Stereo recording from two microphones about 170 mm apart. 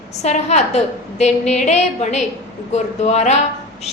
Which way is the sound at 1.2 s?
40° left (ahead or behind).